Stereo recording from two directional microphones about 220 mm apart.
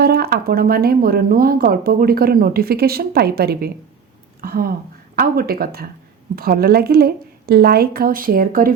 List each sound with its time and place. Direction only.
0.0 s a woman's voice: 45° right (ahead or behind)